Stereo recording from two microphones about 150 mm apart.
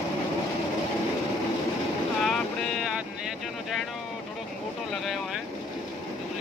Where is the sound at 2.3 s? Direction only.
Centre (ahead or behind).